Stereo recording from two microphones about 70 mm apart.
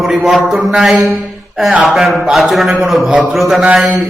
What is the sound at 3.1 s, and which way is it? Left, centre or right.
Speech, centre.